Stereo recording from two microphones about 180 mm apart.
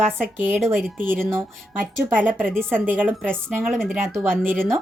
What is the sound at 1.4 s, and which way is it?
Speech, 10° right (ahead or behind).